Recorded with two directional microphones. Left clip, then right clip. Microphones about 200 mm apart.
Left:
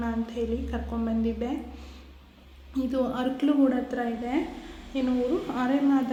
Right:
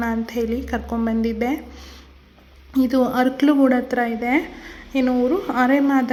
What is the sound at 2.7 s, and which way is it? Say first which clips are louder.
Speech: right 10 dB; 45° right (ahead or behind).